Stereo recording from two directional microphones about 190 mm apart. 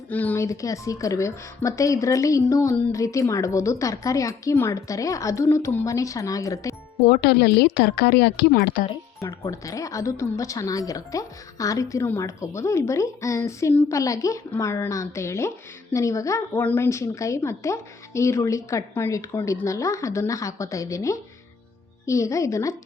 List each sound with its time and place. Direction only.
0.1 s speech: 10° left (ahead or behind)
7.1 s a woman's voice: 60° left (ahead or behind)
9.2 s speech: 15° left (ahead or behind)